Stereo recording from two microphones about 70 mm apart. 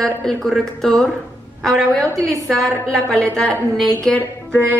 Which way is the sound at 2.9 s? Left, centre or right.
Centre.